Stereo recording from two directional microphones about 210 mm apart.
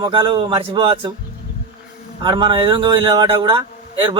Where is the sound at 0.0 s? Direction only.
25° right (ahead or behind).